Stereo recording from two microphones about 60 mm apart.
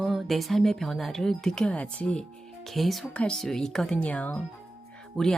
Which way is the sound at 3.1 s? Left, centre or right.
Centre.